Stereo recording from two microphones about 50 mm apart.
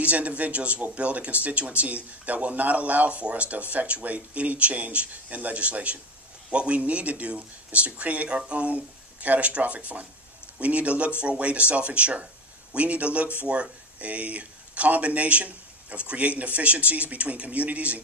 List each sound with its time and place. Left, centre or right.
0.0 s speech: right